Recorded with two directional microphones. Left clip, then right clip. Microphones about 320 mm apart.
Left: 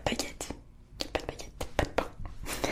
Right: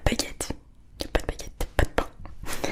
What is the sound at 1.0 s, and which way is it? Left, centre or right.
Whispering, centre.